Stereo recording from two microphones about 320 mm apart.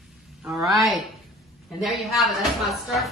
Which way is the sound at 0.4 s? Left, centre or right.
Centre.